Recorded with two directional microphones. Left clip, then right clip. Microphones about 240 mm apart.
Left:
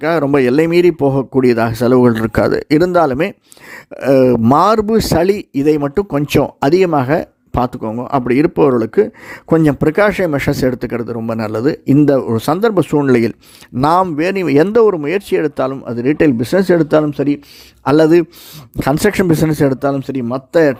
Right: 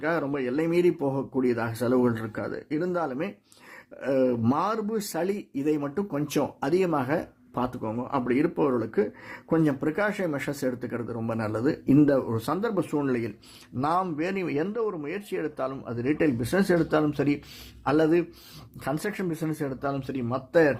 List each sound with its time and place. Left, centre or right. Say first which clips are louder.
0.0 s speech: left 15 dB; left
17.8 s speech: left 13 dB; left